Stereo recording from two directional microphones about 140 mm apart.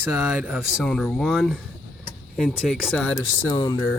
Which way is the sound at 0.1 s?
15° right (ahead or behind).